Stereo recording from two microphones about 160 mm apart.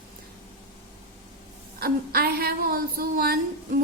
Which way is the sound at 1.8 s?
70° right (ahead or behind).